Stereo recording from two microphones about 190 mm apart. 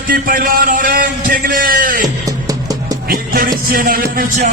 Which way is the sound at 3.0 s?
50° right (ahead or behind).